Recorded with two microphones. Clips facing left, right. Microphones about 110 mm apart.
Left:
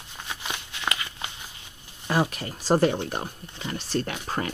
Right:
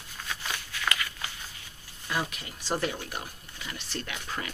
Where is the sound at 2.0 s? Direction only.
45° left (ahead or behind).